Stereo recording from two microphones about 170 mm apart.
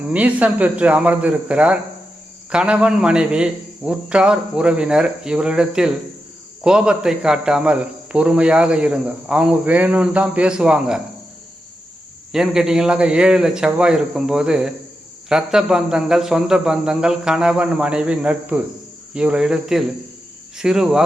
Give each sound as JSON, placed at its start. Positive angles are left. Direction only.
{"t": 0.0, "sound": "speech", "side_deg": -10}
{"t": 12.3, "sound": "speech", "side_deg": -5}